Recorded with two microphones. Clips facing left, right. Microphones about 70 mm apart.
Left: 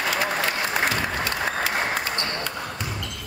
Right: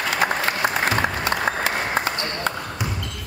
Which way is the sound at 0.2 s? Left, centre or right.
Right.